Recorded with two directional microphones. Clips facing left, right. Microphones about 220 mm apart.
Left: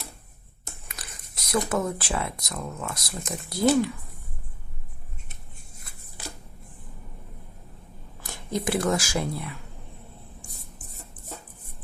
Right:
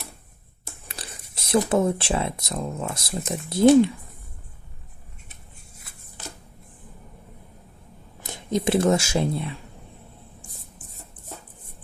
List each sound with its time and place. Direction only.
0.9 s whispering: 30° right (ahead or behind)
1.7 s speech: 25° right (ahead or behind)
8.2 s speech: 20° right (ahead or behind)